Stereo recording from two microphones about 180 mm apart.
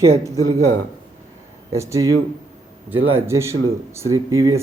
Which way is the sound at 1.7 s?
15° right (ahead or behind).